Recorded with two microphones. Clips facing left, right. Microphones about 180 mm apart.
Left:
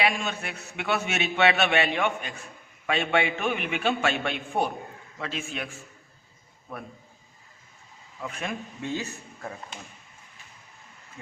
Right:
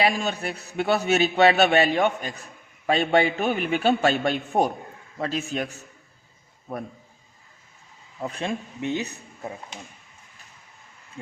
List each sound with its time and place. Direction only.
0.0 s a man's voice: 35° right (ahead or behind)
8.2 s a man's voice: 35° right (ahead or behind)
8.8 s speech: 20° right (ahead or behind)